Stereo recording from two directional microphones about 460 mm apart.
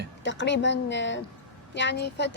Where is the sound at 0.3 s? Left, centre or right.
Left.